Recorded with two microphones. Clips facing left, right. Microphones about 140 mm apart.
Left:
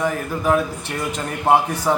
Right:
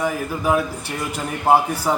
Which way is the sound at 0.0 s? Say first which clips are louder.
Left 1 dB; 10° right (ahead or behind).